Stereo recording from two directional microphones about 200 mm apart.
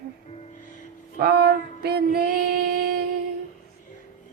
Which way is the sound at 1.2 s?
50° right (ahead or behind).